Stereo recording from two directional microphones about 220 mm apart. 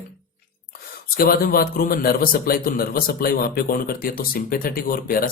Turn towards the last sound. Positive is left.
turn(degrees=40)  # may be behind; listen again after turning